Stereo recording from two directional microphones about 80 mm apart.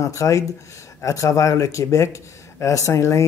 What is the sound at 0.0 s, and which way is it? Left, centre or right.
Speech, left.